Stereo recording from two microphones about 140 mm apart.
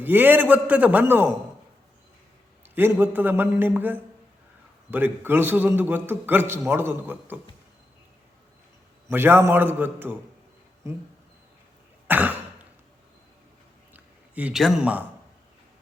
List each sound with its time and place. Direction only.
0.0 s a man's voice: 15° right (ahead or behind)
2.6 s a man's voice: 15° right (ahead or behind)
9.0 s a man's voice: 15° right (ahead or behind)
12.0 s cough: 10° right (ahead or behind)
13.9 s a sound: 10° right (ahead or behind)
14.6 s a man's voice: 5° right (ahead or behind)